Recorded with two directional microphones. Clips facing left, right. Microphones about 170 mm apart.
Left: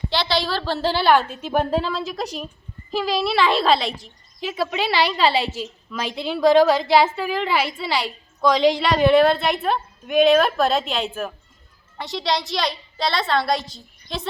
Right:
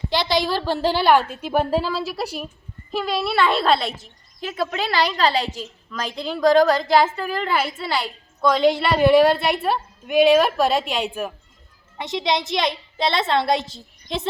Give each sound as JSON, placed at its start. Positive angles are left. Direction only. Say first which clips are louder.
{"t": 0.1, "sound": "a woman's voice", "louder": "right 2 dB", "side_deg": -15}